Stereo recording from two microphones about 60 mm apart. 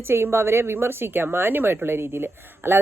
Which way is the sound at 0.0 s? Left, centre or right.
Right.